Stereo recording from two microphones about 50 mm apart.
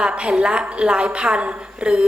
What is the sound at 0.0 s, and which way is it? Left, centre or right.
A woman's voice, centre.